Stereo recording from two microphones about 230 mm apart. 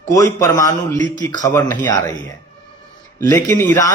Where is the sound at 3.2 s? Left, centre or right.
Centre.